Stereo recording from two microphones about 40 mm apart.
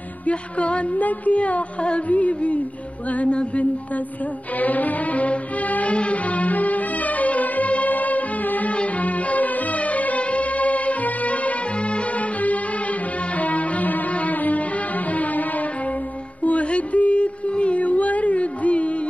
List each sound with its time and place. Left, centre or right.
0.3 s music: left
4.6 s music: left
16.4 s music: left